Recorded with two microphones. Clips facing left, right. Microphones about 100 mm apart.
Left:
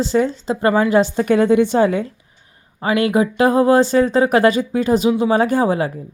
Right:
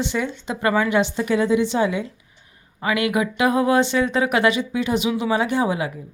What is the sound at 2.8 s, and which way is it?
Speech, 35° left (ahead or behind).